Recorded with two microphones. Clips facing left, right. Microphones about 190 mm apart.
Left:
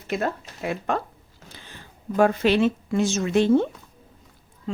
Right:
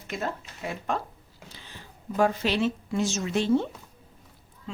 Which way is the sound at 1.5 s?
50° left (ahead or behind).